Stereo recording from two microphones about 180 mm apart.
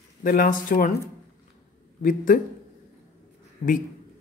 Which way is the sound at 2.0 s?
50° left (ahead or behind).